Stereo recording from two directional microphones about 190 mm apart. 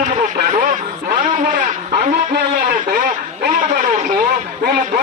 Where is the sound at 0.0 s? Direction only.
40° right (ahead or behind).